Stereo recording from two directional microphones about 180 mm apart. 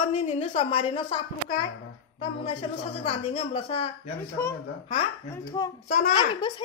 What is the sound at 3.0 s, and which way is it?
Speech, 30° left (ahead or behind).